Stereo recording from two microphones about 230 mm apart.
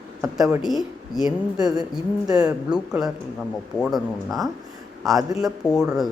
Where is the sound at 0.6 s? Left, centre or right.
Centre.